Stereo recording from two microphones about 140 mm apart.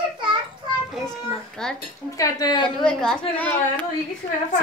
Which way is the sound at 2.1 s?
25° left (ahead or behind).